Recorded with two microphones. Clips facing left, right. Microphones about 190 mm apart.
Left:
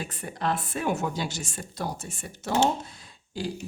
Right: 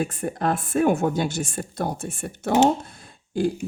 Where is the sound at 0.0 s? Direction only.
50° right (ahead or behind).